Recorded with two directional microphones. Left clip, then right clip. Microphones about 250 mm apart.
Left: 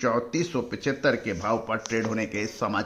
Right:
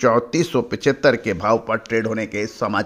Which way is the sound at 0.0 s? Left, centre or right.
Right.